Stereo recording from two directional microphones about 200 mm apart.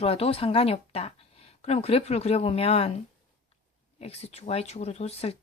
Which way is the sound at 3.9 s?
30° left (ahead or behind).